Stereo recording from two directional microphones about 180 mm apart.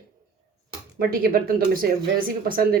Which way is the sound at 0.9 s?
55° right (ahead or behind).